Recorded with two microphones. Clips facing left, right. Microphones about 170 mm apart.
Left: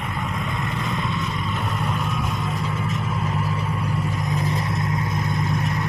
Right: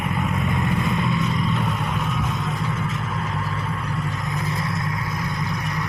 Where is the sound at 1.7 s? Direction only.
Centre (ahead or behind).